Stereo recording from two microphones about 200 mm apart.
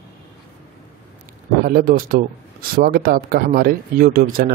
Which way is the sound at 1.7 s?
45° right (ahead or behind).